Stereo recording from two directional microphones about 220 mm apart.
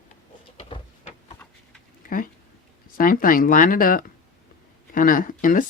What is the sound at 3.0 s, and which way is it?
Speech, 40° left (ahead or behind).